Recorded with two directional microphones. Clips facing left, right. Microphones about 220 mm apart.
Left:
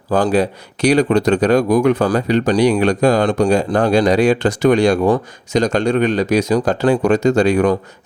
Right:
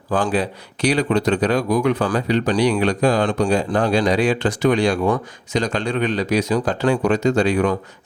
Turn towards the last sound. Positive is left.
turn(degrees=45)  # may be behind; listen again after turning